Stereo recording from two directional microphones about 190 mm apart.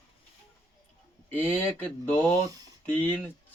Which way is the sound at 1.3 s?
10° left (ahead or behind).